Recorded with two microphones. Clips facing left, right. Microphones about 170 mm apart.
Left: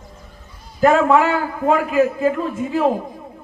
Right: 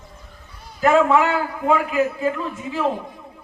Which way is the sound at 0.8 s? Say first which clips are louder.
Left 2 dB; 40° left (ahead or behind).